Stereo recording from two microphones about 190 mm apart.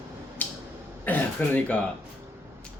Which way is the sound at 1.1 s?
10° left (ahead or behind).